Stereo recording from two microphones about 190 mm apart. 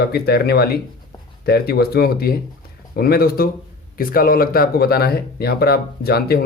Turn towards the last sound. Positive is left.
turn(degrees=55)  # may be behind; listen again after turning